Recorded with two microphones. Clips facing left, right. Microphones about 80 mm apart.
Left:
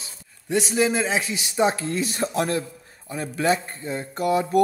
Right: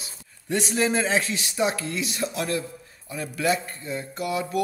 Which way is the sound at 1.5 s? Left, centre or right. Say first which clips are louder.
Left 4 dB; left.